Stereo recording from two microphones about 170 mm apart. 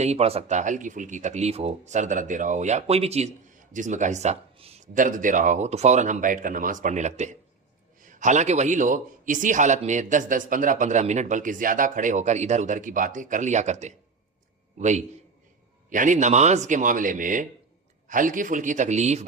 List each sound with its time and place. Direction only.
0.0 s a man's voice: 40° right (ahead or behind)
4.9 s a man's voice: 50° right (ahead or behind)